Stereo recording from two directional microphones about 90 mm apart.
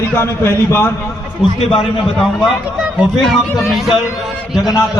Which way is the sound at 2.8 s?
Centre (ahead or behind).